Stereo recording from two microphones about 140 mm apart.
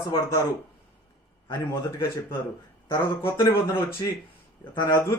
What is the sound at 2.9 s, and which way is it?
Speech, 20° left (ahead or behind).